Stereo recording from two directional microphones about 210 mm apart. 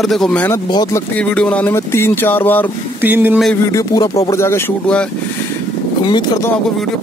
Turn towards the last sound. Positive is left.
turn(degrees=20)  # may be behind; listen again after turning